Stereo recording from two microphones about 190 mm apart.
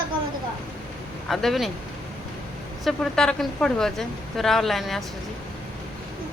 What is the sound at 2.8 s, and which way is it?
A woman's voice, 5° left (ahead or behind).